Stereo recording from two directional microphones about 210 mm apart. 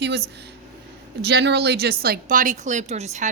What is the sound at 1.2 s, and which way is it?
A woman's voice, 50° right (ahead or behind).